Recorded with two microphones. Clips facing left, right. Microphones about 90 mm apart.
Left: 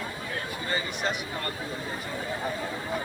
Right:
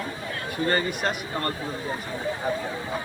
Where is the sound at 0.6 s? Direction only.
55° right (ahead or behind).